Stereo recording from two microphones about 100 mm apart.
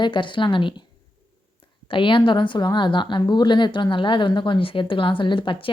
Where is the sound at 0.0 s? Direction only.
55° left (ahead or behind).